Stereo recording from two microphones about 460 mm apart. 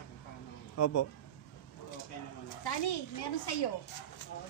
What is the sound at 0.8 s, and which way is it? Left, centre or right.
Speech, left.